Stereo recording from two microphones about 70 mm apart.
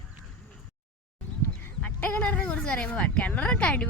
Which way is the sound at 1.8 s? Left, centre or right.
Left.